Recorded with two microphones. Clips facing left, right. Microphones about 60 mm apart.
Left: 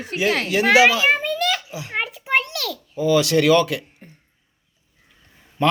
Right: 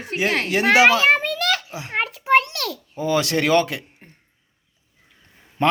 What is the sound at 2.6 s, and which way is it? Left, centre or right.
A child's voice, right.